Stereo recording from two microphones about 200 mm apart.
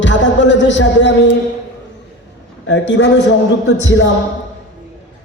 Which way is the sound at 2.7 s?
65° left (ahead or behind).